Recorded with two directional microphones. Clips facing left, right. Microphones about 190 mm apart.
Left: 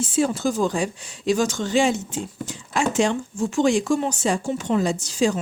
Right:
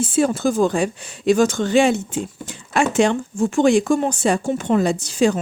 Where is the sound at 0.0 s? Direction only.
55° right (ahead or behind).